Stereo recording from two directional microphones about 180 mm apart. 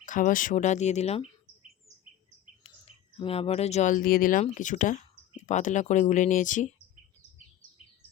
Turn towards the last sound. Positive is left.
turn(degrees=45)  # may be behind; listen again after turning